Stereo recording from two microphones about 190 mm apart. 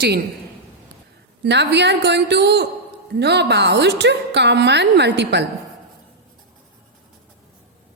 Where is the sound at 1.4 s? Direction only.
65° right (ahead or behind).